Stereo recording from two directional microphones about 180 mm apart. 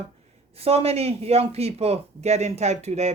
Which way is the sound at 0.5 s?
35° right (ahead or behind).